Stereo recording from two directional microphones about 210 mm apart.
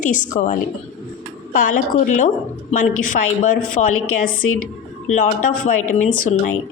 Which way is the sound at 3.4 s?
40° left (ahead or behind).